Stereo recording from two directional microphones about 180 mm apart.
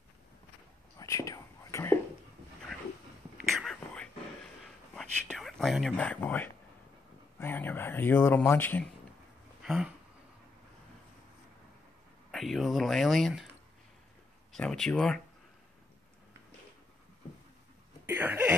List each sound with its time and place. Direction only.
0.9 s whispering: 15° left (ahead or behind)
3.5 s whispering: 5° left (ahead or behind)
7.3 s speech: 10° left (ahead or behind)
9.6 s speech: 5° right (ahead or behind)
12.3 s speech: centre (ahead or behind)
14.5 s speech: 5° left (ahead or behind)
18.0 s a sound: 10° right (ahead or behind)